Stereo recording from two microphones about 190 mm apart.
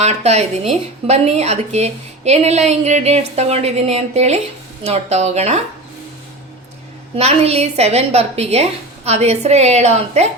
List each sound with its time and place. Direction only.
0.0 s a woman's voice: 35° right (ahead or behind)
7.2 s a woman's voice: 35° right (ahead or behind)